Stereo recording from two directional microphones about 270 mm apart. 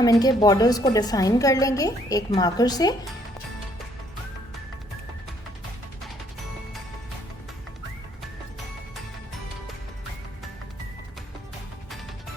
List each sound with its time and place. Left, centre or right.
0.0 s a woman's voice: centre